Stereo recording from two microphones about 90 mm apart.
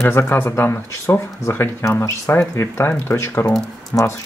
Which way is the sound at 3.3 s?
20° left (ahead or behind).